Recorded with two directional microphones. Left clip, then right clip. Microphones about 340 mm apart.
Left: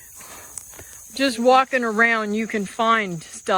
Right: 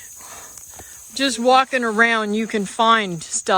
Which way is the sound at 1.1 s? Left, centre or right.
Centre.